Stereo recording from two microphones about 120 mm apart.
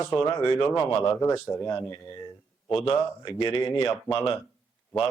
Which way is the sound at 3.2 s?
50° left (ahead or behind).